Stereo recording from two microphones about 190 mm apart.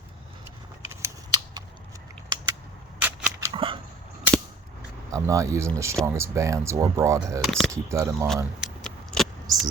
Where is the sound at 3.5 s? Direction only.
25° right (ahead or behind).